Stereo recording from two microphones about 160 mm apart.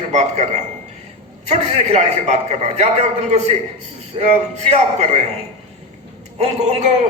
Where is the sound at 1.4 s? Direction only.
45° right (ahead or behind).